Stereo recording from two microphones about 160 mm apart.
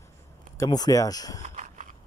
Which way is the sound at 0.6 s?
25° left (ahead or behind).